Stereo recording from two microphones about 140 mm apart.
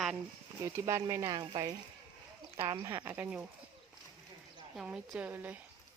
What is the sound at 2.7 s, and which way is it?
Speech, 20° right (ahead or behind).